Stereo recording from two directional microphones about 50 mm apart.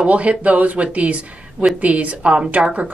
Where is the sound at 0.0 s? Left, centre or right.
Right.